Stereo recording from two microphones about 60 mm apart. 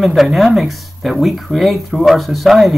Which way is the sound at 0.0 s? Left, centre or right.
Centre.